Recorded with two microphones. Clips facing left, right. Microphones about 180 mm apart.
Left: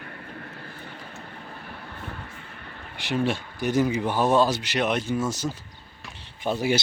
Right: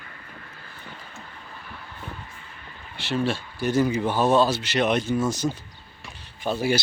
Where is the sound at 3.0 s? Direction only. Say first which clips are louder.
Even; 15° left (ahead or behind).